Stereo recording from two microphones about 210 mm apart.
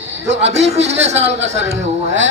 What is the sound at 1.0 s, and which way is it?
A man's voice, 30° right (ahead or behind).